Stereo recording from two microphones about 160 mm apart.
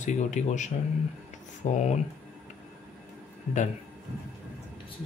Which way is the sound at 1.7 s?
45° left (ahead or behind).